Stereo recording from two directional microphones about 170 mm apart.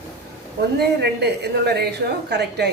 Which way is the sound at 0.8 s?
75° right (ahead or behind).